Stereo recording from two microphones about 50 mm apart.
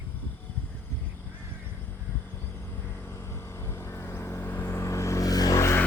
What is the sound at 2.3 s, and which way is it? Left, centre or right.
Vehicle, left.